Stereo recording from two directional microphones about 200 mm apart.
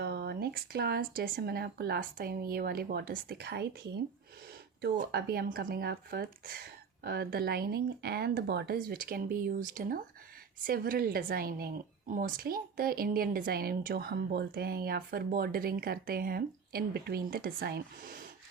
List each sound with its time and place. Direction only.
0.0 s a woman's voice: 55° right (ahead or behind)
4.8 s a woman's voice: 55° right (ahead or behind)